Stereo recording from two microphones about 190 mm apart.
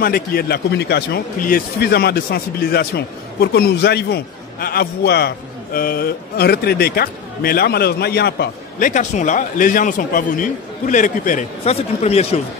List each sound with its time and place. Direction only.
0.0 s speech: 50° left (ahead or behind); by 12.4 s 35° left (ahead or behind)